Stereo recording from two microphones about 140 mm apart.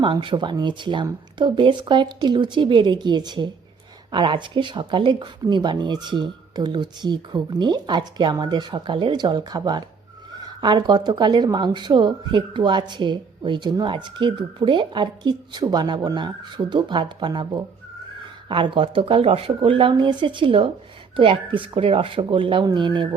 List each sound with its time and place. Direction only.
0.0 s speech: 35° right (ahead or behind)